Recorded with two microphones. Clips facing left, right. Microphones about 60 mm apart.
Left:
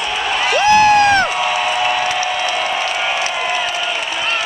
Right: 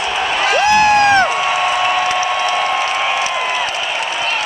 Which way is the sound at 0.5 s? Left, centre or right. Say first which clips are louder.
Left 1 dB; right.